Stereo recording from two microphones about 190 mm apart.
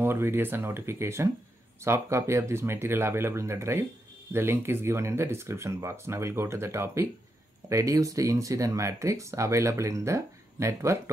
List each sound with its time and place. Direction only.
0.0 s speech: 10° right (ahead or behind)